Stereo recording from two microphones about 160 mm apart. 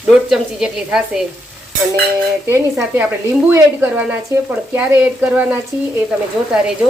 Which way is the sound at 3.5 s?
10° right (ahead or behind).